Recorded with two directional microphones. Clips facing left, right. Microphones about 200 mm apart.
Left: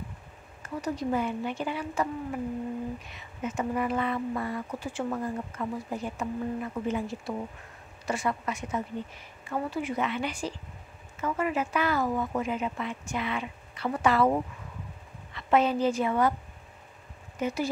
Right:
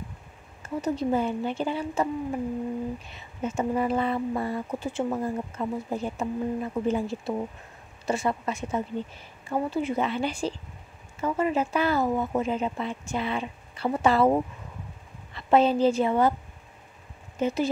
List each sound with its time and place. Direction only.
0.6 s speech: 25° right (ahead or behind)
3.1 s a woman's voice: 30° right (ahead or behind)
17.4 s speech: 25° right (ahead or behind)